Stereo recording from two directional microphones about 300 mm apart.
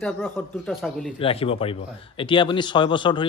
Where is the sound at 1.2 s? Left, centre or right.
Centre.